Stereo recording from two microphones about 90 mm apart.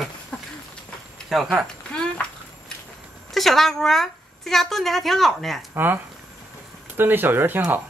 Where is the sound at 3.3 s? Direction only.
5° left (ahead or behind).